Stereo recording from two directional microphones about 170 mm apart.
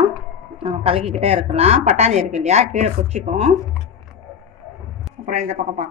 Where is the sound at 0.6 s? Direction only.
35° right (ahead or behind).